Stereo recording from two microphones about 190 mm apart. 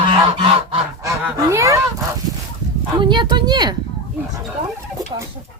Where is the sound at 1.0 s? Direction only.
15° right (ahead or behind).